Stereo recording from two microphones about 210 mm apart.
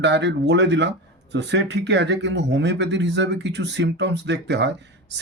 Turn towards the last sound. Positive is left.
turn(degrees=-55)  # may be behind; listen again after turning